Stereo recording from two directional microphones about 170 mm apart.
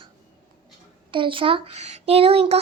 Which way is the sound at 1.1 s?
30° right (ahead or behind).